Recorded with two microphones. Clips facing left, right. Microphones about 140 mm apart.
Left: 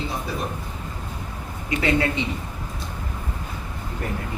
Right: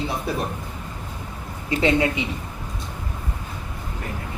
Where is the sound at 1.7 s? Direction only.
25° right (ahead or behind).